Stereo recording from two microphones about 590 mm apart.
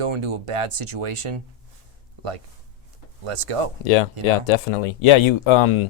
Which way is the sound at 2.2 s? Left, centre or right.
Right.